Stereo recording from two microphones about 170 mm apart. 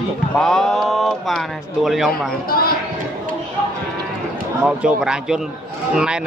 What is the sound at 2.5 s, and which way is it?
Speech, 60° left (ahead or behind).